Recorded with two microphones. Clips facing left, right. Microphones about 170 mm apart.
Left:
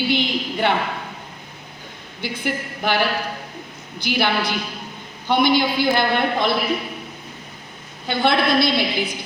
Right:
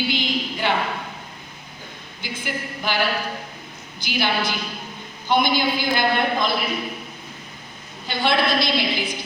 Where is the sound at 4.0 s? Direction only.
60° left (ahead or behind).